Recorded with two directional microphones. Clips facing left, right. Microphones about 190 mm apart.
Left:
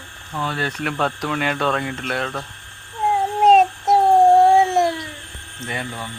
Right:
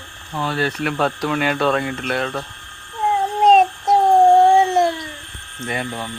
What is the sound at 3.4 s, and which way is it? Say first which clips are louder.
Child singing: even; 5° left (ahead or behind).